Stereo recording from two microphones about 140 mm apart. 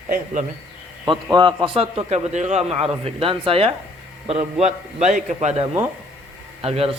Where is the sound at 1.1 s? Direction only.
30° right (ahead or behind).